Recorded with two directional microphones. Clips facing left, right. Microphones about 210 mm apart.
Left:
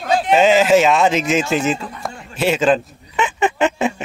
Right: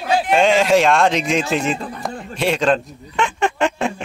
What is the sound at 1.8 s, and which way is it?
Speech, 35° right (ahead or behind).